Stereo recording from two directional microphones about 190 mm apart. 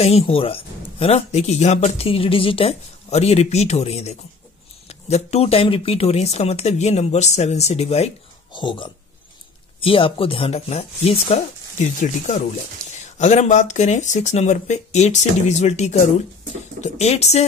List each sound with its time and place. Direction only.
0.0 s speech: 30° left (ahead or behind)